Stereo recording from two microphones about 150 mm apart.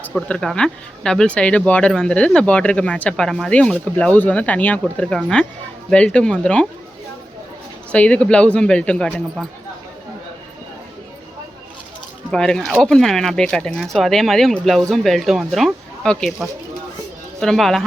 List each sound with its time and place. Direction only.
0.1 s speech: 5° left (ahead or behind)
7.9 s speech: 5° left (ahead or behind)
12.3 s speech: 5° left (ahead or behind)